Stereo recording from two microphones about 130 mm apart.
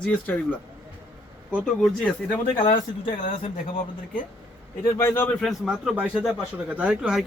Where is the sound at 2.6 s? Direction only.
90° left.